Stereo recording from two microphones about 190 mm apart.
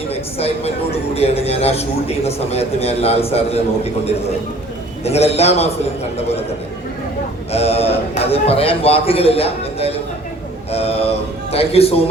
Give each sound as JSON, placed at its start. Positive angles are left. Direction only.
{"t": 0.1, "sound": "a man's voice", "side_deg": 30}
{"t": 7.5, "sound": "a man's voice", "side_deg": 35}